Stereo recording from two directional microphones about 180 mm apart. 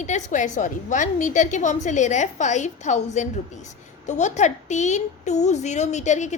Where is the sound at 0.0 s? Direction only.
40° left (ahead or behind).